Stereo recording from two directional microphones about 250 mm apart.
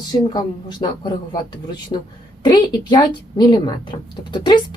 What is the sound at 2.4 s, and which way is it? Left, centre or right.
Speech, centre.